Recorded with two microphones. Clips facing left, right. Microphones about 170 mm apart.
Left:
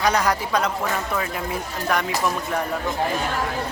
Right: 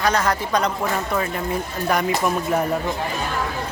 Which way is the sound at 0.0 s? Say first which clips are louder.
Even; 15° left (ahead or behind).